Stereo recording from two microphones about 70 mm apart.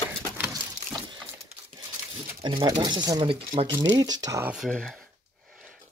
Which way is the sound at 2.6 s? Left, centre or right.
Right.